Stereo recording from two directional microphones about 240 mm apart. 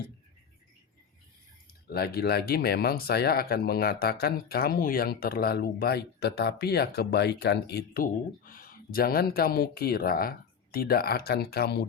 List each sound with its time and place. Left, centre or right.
1.9 s speech: left